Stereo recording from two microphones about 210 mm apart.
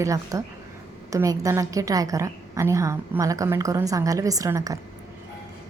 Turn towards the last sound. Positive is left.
turn(degrees=-15)  # may be behind; listen again after turning